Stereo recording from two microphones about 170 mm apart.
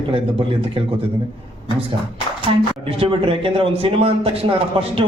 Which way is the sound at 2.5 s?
35° right (ahead or behind).